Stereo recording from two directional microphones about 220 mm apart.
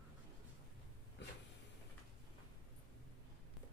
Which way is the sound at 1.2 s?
50° left (ahead or behind).